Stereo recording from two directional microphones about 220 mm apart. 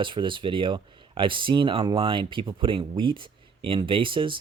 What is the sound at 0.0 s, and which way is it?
Speech, 20° right (ahead or behind).